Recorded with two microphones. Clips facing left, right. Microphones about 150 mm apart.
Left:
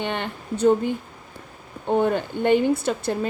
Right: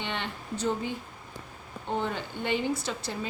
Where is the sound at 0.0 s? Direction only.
50° left (ahead or behind).